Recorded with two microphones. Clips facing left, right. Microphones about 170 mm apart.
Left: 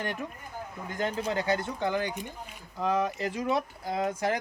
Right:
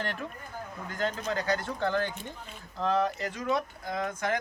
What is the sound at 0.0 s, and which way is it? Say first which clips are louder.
Speech: left 1 dB; 15° left (ahead or behind).